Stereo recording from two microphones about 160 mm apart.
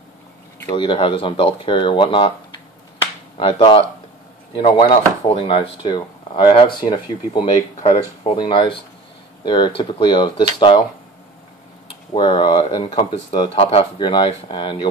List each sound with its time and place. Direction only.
0.7 s speech: 30° left (ahead or behind)
3.3 s speech: 30° left (ahead or behind)
12.1 s speech: 30° left (ahead or behind)